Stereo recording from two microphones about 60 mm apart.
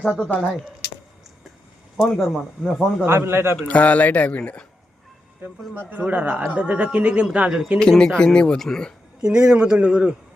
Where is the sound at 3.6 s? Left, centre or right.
Left.